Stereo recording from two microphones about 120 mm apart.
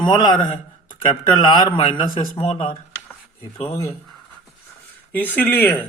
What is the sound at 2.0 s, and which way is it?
Speech, 50° left (ahead or behind).